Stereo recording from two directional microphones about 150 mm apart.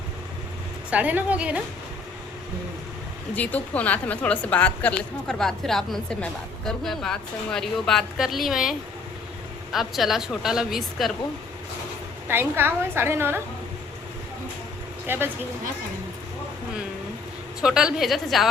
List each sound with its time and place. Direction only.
0.9 s a woman's voice: 10° right (ahead or behind)
3.3 s a woman's voice: 10° left (ahead or behind)
9.7 s a woman's voice: centre (ahead or behind)
12.3 s a woman's voice: 15° right (ahead or behind)
15.0 s speech: 15° right (ahead or behind)
17.6 s a woman's voice: 5° right (ahead or behind)